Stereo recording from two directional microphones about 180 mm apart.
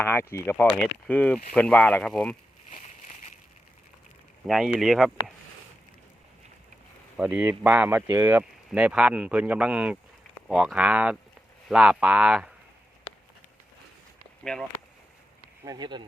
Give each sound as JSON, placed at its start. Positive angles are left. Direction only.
{"t": 0.0, "sound": "speech", "side_deg": 15}
{"t": 4.4, "sound": "speech", "side_deg": 0}
{"t": 7.2, "sound": "speech", "side_deg": -10}
{"t": 15.6, "sound": "speech", "side_deg": -20}